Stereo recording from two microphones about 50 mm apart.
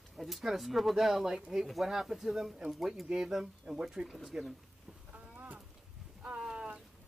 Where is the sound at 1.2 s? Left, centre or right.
Centre.